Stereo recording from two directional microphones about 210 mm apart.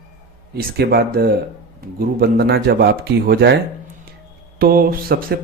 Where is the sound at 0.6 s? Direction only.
50° right (ahead or behind).